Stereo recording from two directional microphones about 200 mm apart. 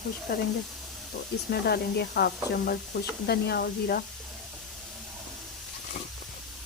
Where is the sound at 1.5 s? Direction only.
50° left (ahead or behind).